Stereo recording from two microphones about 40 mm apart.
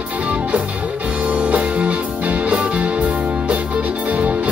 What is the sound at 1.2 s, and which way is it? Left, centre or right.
Music, right.